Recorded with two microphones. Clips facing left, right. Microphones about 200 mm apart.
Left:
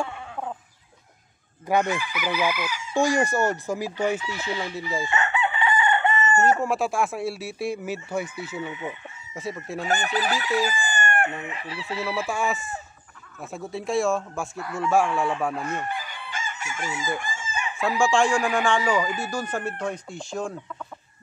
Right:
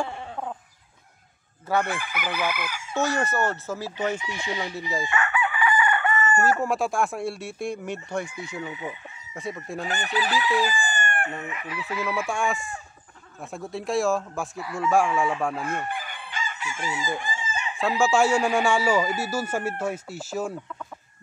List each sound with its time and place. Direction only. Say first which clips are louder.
2.0 s chicken: left 3 dB; 55° right (ahead or behind)
2.9 s chicken: left 3 dB; 15° left (ahead or behind)
4.2 s speech: left 1 dB; 15° right (ahead or behind)
5.1 s chicken: left 1 dB; 25° left (ahead or behind)
6.6 s speech: even; centre (ahead or behind)
9.8 s chicken: left 3 dB; 45° left (ahead or behind)
11.4 s chicken: even; 30° left (ahead or behind)
12.3 s speech: even; centre (ahead or behind)
15.9 s chicken: left 1 dB; 55° right (ahead or behind)
16.3 s chicken: even; 45° left (ahead or behind)
17.7 s speech: even; centre (ahead or behind)